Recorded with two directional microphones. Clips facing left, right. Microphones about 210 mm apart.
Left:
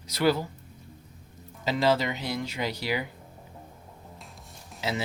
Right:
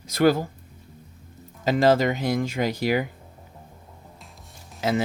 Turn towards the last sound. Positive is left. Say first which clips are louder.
# right 7 dB
turn(degrees=-50)  # may be behind; listen again after turning